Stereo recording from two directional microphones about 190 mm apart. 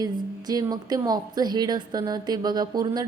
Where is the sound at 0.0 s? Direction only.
20° right (ahead or behind).